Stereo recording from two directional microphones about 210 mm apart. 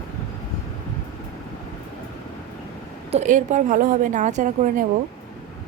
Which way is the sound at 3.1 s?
35° right (ahead or behind).